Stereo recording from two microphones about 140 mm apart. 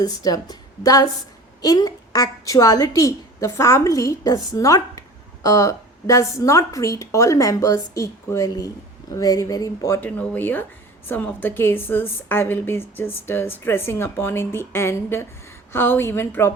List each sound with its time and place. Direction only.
0.0 s a woman's voice: 25° left (ahead or behind)